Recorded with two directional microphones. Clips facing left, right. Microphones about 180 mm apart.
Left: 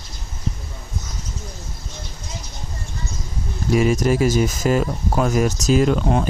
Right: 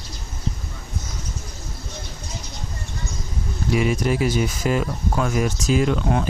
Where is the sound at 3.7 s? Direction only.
40° left (ahead or behind).